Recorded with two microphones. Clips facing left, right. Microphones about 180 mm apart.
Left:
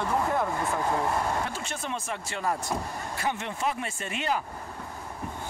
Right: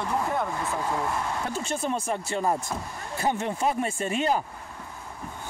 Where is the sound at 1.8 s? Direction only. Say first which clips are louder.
Right 6 dB; 40° right (ahead or behind).